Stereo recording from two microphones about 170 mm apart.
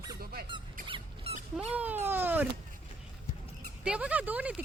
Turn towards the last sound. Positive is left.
turn(degrees=-10)  # may be behind; listen again after turning